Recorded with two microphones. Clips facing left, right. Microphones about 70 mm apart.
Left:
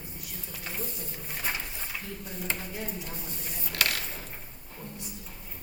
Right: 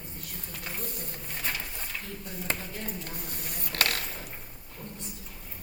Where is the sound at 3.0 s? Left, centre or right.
Right.